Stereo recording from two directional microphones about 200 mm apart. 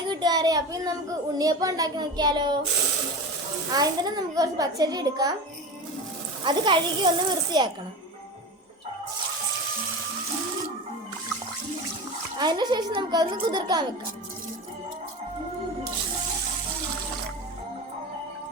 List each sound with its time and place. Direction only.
0.1 s child singing: 20° right (ahead or behind)
1.4 s a child's voice: 20° right (ahead or behind)
3.7 s a child's voice: 20° right (ahead or behind)
6.4 s a child's voice: 25° right (ahead or behind)
12.4 s a child's voice: 20° right (ahead or behind)